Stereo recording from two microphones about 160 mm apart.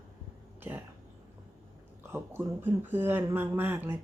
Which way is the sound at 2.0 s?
15° right (ahead or behind).